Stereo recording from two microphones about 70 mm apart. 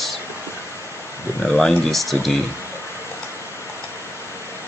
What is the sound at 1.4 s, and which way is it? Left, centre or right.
Speech, centre.